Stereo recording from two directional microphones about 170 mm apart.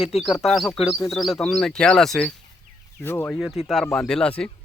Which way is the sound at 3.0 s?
15° left (ahead or behind).